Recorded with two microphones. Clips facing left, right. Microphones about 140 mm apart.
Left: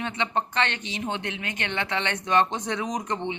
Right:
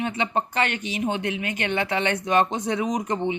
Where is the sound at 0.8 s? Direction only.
25° left (ahead or behind).